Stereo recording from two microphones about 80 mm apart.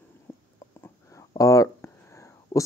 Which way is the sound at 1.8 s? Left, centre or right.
Left.